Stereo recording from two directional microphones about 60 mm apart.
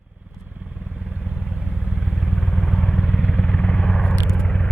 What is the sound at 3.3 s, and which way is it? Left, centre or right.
Vehicle, left.